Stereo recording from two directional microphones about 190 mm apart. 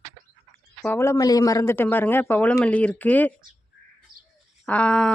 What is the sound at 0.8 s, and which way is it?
Speech, 15° left (ahead or behind).